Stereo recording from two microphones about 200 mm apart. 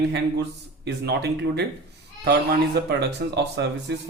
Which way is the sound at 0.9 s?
55° right (ahead or behind).